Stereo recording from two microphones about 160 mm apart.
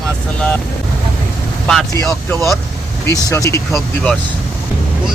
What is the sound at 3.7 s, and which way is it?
Speech, centre (ahead or behind).